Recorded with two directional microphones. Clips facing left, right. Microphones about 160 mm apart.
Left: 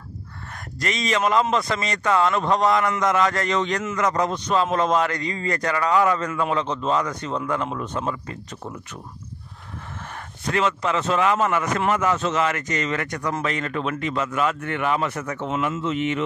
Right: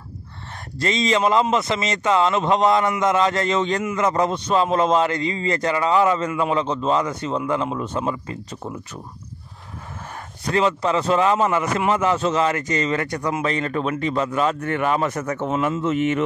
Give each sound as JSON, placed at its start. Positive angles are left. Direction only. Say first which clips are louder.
{"t": 0.7, "sound": "a man's voice", "louder": "right 4 dB", "side_deg": -25}
{"t": 10.5, "sound": "a man's voice", "louder": "right 3 dB", "side_deg": -30}
{"t": 15.8, "sound": "a man's voice", "louder": "right 4 dB", "side_deg": -45}